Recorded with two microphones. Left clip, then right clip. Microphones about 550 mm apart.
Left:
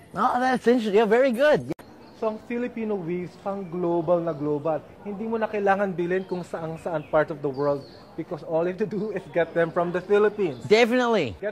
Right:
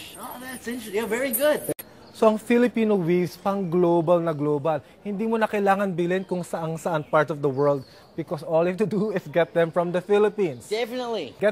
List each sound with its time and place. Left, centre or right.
0.2 s speech: left
2.1 s speech: right
10.7 s speech: left